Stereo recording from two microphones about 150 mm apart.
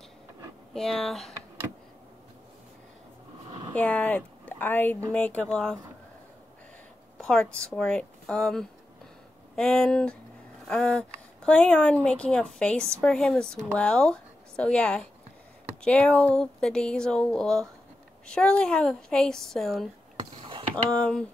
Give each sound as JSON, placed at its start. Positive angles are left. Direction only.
{"t": 0.7, "sound": "speech", "side_deg": 5}
{"t": 3.7, "sound": "speech", "side_deg": 10}
{"t": 7.2, "sound": "a sound", "side_deg": 5}
{"t": 7.5, "sound": "speech", "side_deg": 5}